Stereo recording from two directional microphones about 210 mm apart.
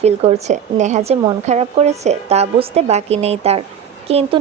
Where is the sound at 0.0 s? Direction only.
30° right (ahead or behind).